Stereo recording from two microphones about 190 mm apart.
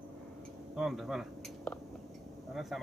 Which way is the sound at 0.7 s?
Centre (ahead or behind).